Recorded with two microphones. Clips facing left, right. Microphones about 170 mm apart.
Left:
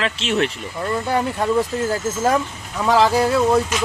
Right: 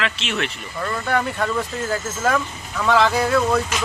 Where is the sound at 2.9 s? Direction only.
35° left (ahead or behind).